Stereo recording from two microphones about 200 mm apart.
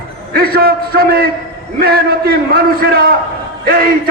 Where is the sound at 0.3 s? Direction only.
50° right (ahead or behind).